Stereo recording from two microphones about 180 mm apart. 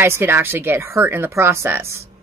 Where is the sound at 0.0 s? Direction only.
15° right (ahead or behind).